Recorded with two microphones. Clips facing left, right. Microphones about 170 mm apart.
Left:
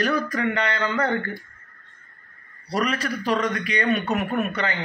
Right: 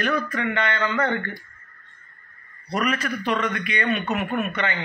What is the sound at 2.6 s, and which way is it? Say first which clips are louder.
A man's voice: even; 35° left (ahead or behind).